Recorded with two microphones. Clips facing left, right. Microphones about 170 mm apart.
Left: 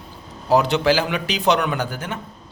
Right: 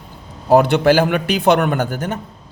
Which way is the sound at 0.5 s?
55° right (ahead or behind).